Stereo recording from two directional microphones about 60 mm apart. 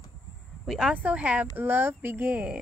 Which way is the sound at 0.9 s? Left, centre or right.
Right.